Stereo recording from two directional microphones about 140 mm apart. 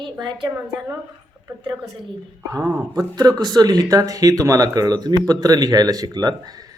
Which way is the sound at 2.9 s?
30° right (ahead or behind).